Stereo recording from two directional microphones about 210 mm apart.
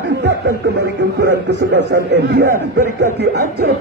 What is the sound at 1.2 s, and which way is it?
Speech, 55° right (ahead or behind).